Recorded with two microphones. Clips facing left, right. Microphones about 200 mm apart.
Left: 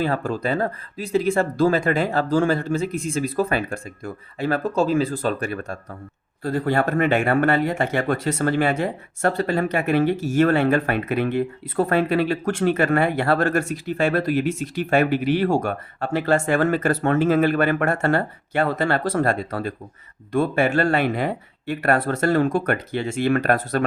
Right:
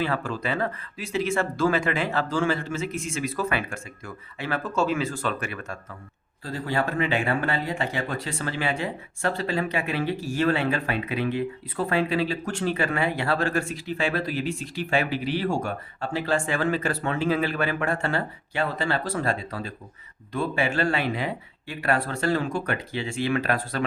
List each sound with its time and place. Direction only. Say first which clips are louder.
0.0 s speech: left 4 dB; 40° left (ahead or behind)
6.4 s speech: left 6 dB; 50° left (ahead or behind)